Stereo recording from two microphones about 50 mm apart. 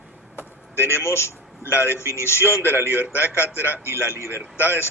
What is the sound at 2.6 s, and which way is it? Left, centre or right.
Speech, right.